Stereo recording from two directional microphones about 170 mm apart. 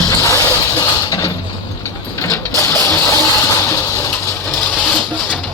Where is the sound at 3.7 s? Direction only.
15° left (ahead or behind).